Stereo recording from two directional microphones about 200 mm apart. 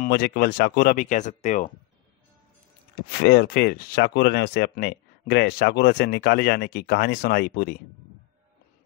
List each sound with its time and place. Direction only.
0.0 s speech: 50° left (ahead or behind)
3.1 s speech: 55° left (ahead or behind)